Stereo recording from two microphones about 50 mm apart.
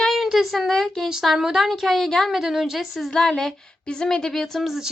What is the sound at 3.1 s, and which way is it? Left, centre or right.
Speech, centre.